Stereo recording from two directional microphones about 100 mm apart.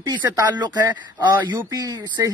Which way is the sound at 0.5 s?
45° right (ahead or behind).